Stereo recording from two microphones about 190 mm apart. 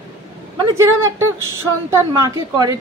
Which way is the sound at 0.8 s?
15° right (ahead or behind).